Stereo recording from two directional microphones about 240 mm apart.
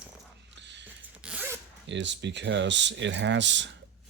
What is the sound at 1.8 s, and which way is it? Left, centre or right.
Speech, right.